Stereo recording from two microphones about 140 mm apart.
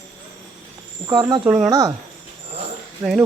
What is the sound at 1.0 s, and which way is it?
Speech, 30° right (ahead or behind).